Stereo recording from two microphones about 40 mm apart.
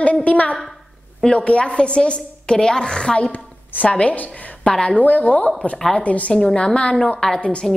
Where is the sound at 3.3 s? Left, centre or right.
Left.